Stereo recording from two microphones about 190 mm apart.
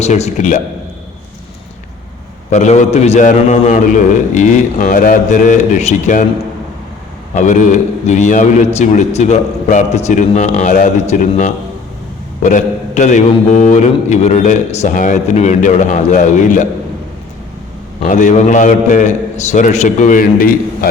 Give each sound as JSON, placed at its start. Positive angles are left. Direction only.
{"t": 0.0, "sound": "a man's voice", "side_deg": 35}
{"t": 2.5, "sound": "a man's voice", "side_deg": 35}
{"t": 7.3, "sound": "a man's voice", "side_deg": 40}
{"t": 18.0, "sound": "a man's voice", "side_deg": 40}